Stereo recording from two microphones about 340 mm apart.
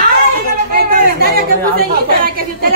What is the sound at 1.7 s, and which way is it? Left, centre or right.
A woman's voice, right.